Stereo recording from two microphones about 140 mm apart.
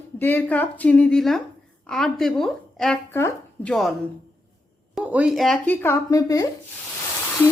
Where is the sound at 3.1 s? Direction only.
15° left (ahead or behind).